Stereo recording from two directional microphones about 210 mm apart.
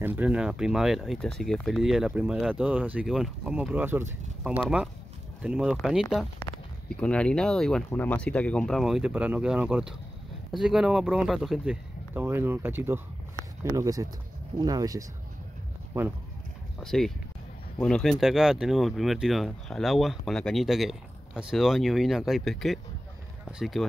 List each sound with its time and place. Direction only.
0.0 s speech: 10° right (ahead or behind)
16.8 s speech: centre (ahead or behind)